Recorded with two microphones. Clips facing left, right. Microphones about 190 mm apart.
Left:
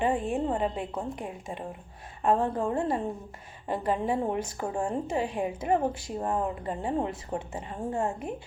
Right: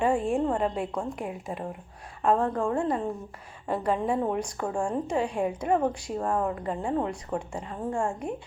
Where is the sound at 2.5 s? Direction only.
25° left (ahead or behind).